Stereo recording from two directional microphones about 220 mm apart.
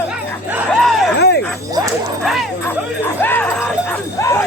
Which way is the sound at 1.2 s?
50° left (ahead or behind).